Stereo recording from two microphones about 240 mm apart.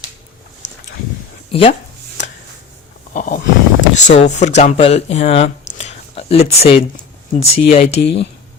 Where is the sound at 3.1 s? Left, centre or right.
Left.